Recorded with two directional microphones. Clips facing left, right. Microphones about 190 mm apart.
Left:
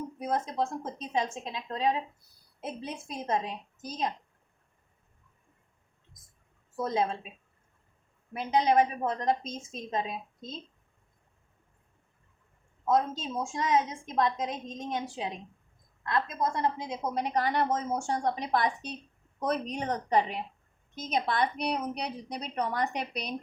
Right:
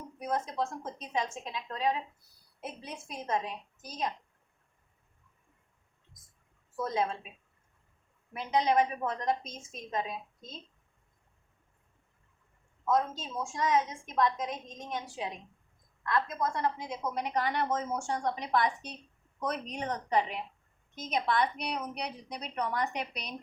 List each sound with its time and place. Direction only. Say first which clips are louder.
0.2 s a woman's voice: left 2 dB; 25° left (ahead or behind)
6.7 s a woman's voice: left 2 dB; 25° left (ahead or behind)
8.3 s a woman's voice: left 3 dB; 30° left (ahead or behind)
12.8 s a woman's voice: left 2 dB; 25° left (ahead or behind)